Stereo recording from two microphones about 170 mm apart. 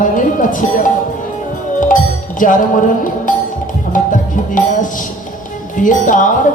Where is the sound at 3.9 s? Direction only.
50° left (ahead or behind).